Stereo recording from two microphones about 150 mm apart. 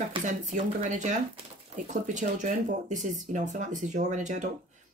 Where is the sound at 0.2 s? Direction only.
55° right (ahead or behind).